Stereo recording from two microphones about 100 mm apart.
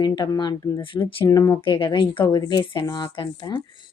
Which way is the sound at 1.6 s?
55° left (ahead or behind).